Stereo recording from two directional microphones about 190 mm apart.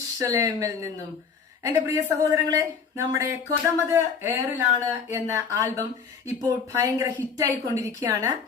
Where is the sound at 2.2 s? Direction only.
15° right (ahead or behind).